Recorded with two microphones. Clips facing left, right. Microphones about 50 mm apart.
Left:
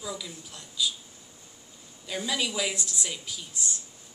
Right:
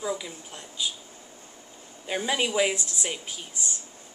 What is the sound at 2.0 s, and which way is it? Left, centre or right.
A woman's voice, right.